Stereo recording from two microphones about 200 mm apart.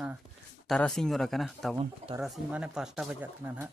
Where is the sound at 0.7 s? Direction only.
Centre (ahead or behind).